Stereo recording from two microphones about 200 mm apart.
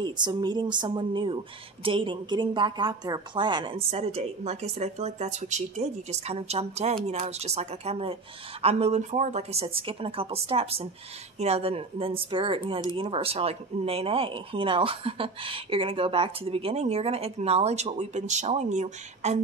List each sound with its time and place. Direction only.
0.0 s a woman's voice: 20° right (ahead or behind)